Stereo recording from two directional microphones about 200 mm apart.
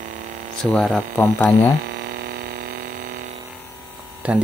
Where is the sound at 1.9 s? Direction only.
55° right (ahead or behind).